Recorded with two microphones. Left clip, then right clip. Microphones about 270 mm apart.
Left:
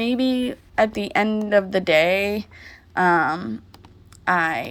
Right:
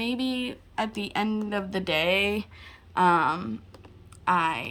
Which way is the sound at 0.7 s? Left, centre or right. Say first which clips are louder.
Left 10 dB; centre.